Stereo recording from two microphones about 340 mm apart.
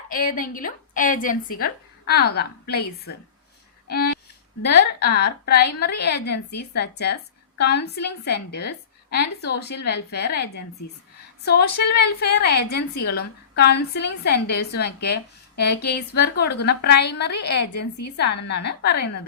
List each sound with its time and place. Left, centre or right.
0.1 s a woman's voice: left
3.8 s a sound: left
4.6 s a woman's voice: left